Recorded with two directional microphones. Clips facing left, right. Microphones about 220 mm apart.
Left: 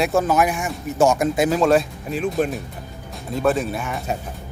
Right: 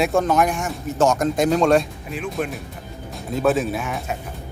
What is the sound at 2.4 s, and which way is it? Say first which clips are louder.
Speech: left 4 dB; 35° left (ahead or behind).